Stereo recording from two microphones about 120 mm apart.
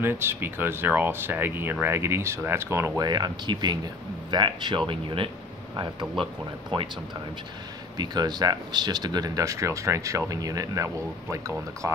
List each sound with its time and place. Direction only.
0.0 s speech: 20° right (ahead or behind)
3.0 s speech: 35° right (ahead or behind)
8.0 s speech: 35° right (ahead or behind)